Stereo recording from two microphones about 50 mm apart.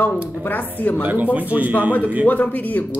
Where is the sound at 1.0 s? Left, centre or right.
Right.